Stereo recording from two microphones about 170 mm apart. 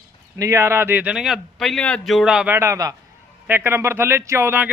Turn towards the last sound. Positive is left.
turn(degrees=-10)  # may be behind; listen again after turning